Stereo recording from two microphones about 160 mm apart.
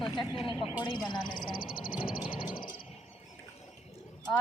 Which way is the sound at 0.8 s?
30° left (ahead or behind).